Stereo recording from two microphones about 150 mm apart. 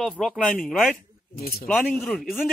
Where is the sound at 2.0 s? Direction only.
Centre (ahead or behind).